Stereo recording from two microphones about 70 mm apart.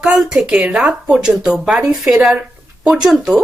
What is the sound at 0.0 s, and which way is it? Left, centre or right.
Speech, centre.